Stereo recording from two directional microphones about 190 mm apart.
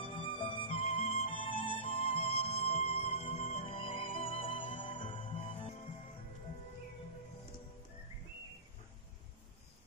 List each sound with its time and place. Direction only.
0.0 s music: 25° left (ahead or behind)